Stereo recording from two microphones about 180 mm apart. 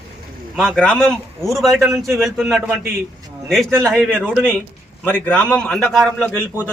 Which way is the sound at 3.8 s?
5° left (ahead or behind).